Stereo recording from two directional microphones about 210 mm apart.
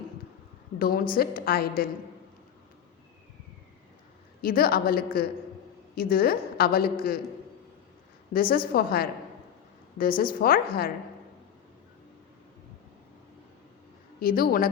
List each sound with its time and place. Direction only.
0.8 s a woman's voice: 45° left (ahead or behind)
4.4 s a woman's voice: 45° left (ahead or behind)
8.3 s a woman's voice: 45° left (ahead or behind)
14.2 s a woman's voice: 45° left (ahead or behind)